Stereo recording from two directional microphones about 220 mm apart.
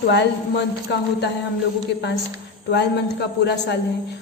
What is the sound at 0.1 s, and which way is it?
A woman's voice, 50° left (ahead or behind).